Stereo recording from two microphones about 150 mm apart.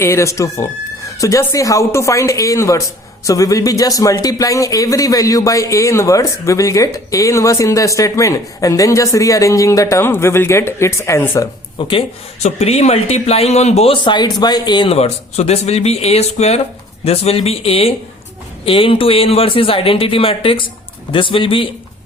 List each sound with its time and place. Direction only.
0.0 s speech: 20° left (ahead or behind)
11.9 s a man's voice: 40° left (ahead or behind)
14.8 s a man's voice: 45° left (ahead or behind)